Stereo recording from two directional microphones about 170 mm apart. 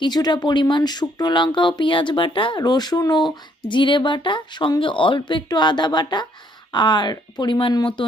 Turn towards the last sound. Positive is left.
turn(degrees=25)  # may be behind; listen again after turning